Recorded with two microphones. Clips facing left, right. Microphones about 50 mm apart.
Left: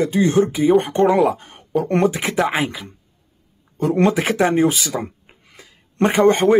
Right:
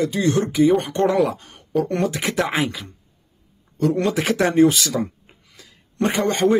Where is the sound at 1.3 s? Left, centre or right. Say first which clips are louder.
Left 1 dB; left.